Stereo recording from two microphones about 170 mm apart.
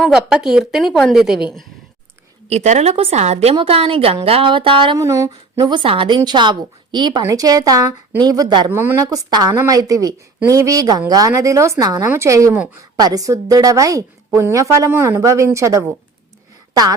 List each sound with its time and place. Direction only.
0.0 s a woman's voice: 5° right (ahead or behind)
2.5 s a woman's voice: 40° right (ahead or behind)
4.9 s a woman's voice: 15° right (ahead or behind)
8.7 s a woman's voice: 15° right (ahead or behind)